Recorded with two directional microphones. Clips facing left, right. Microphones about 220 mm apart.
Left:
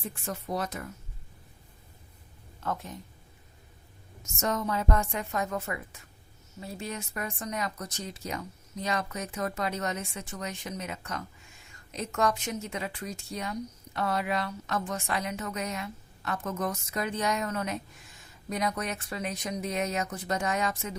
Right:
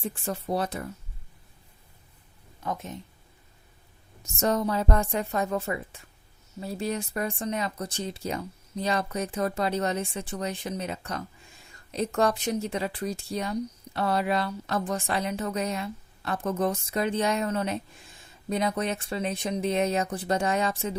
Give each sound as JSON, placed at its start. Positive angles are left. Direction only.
{"t": 0.0, "sound": "speech", "side_deg": -30}
{"t": 2.6, "sound": "speech", "side_deg": -20}
{"t": 4.2, "sound": "speech", "side_deg": -35}